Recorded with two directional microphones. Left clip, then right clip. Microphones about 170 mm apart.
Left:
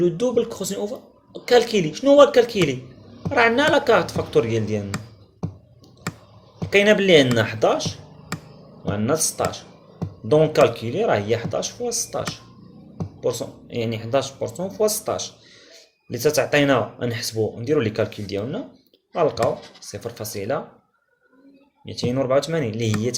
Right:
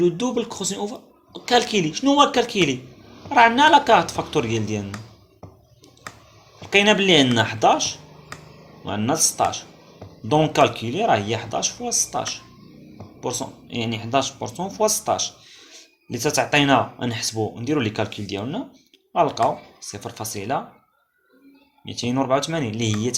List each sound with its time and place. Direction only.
0.0 s speech: 20° right (ahead or behind)
6.7 s speech: 25° right (ahead or behind)
21.8 s speech: 30° right (ahead or behind)